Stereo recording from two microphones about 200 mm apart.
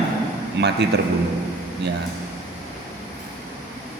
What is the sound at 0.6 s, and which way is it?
Speech, 60° right (ahead or behind).